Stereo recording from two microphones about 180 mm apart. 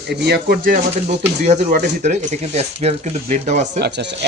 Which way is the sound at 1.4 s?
40° right (ahead or behind).